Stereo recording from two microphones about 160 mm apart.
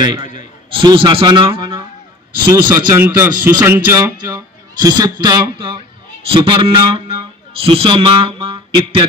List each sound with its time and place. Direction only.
0.0 s a man's voice: 25° right (ahead or behind)